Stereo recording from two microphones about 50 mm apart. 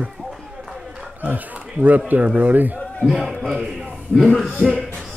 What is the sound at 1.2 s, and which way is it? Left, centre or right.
Speech, right.